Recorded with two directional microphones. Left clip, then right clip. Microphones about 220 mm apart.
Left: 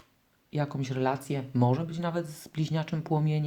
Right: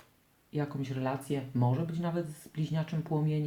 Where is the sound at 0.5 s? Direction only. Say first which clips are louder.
Left 4 dB; 45° left (ahead or behind).